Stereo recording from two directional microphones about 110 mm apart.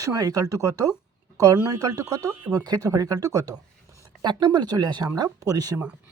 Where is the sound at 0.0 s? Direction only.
35° right (ahead or behind).